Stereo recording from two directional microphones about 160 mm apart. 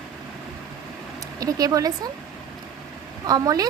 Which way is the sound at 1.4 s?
20° right (ahead or behind).